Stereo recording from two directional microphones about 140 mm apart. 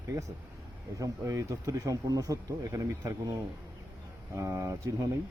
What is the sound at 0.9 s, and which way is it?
Speech, 25° right (ahead or behind).